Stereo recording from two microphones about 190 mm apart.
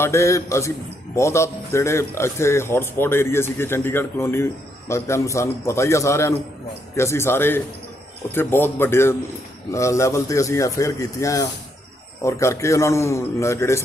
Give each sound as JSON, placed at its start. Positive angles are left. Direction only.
{"t": 0.0, "sound": "a man's voice", "side_deg": 15}